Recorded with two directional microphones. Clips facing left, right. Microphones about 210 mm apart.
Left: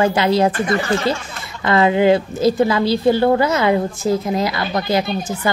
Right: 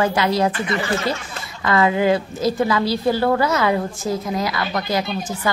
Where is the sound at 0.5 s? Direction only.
45° left (ahead or behind).